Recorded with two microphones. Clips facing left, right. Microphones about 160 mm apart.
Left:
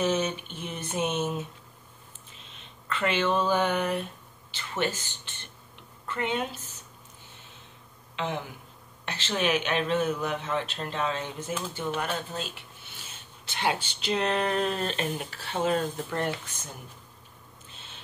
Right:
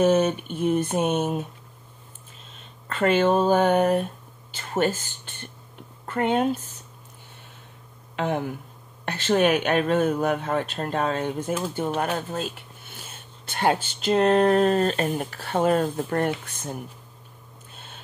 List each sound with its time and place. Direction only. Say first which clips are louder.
0.0 s speech: right 8 dB; 50° right (ahead or behind)
8.2 s speech: right 7 dB; 50° right (ahead or behind)
17.6 s owl: right 5 dB; 50° right (ahead or behind)